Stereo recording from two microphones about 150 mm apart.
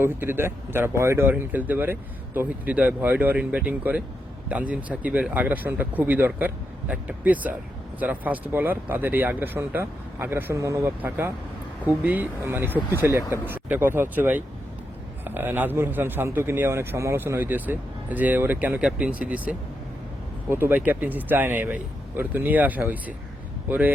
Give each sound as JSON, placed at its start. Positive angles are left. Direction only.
{"t": 0.0, "sound": "speech", "side_deg": -15}